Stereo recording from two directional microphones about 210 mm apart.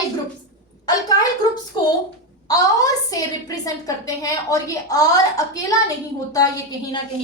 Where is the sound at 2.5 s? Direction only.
15° left (ahead or behind).